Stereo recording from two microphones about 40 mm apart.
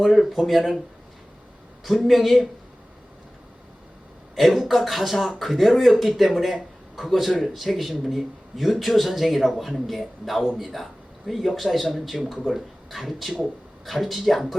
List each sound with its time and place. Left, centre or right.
0.0 s speech: centre
1.8 s speech: centre
4.4 s a man's voice: centre